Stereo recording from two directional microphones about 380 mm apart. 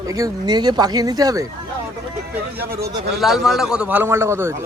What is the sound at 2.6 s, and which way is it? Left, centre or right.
Speech, right.